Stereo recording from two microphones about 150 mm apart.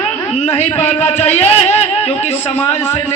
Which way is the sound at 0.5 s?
45° left (ahead or behind).